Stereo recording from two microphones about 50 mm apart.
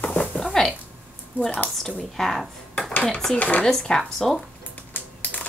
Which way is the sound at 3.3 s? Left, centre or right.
Left.